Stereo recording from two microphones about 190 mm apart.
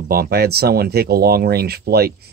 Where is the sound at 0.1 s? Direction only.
55° right (ahead or behind).